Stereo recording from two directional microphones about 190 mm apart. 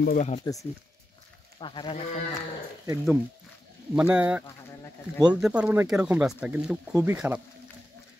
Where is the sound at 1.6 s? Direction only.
25° left (ahead or behind).